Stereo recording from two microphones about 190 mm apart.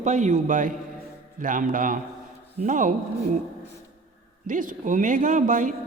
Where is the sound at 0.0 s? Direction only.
40° right (ahead or behind).